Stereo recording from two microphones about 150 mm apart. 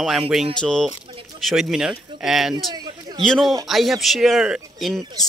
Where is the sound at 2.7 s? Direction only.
30° right (ahead or behind).